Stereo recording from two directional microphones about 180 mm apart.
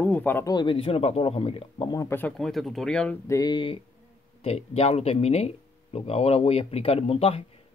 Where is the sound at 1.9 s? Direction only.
15° left (ahead or behind).